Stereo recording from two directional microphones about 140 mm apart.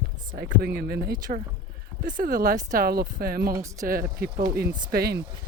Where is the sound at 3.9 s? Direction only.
90° right.